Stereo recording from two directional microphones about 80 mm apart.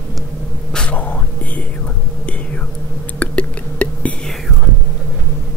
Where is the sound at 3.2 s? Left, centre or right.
Centre.